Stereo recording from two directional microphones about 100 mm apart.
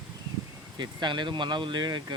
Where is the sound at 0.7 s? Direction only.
45° right (ahead or behind).